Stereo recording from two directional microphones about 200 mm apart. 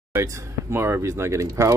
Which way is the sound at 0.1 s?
10° right (ahead or behind).